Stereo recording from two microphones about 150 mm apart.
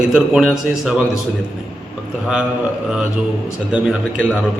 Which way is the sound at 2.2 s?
5° right (ahead or behind).